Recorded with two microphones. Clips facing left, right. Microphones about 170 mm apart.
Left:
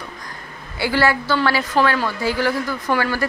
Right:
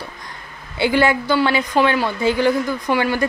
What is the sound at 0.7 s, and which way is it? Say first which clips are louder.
A woman's voice: right 2 dB; 20° right (ahead or behind).